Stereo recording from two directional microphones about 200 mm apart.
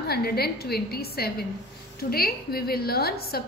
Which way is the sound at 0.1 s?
50° left (ahead or behind).